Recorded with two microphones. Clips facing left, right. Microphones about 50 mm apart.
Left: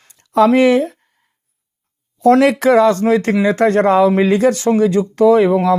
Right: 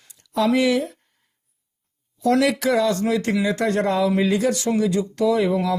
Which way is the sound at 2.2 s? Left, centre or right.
Left.